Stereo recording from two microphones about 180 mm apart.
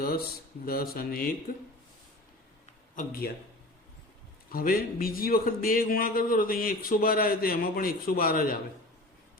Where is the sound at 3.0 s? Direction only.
55° left (ahead or behind).